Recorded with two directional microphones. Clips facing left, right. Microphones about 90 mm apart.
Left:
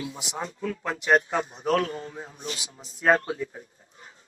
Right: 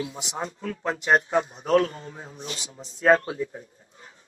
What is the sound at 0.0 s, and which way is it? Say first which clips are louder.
A man's voice: right 2 dB; 35° right (ahead or behind).